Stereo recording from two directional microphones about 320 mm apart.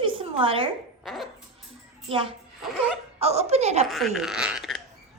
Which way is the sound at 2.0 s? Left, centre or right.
Centre.